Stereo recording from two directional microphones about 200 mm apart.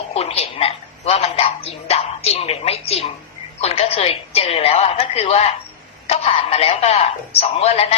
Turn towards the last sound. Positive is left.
turn(degrees=30)  # may be behind; listen again after turning